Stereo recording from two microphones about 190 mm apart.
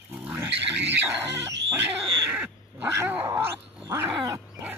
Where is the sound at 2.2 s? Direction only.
10° right (ahead or behind).